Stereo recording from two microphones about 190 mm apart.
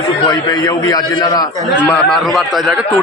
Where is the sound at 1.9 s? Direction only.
Centre (ahead or behind).